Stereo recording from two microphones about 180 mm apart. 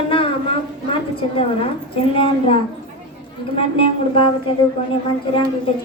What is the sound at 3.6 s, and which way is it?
Speech, 30° left (ahead or behind).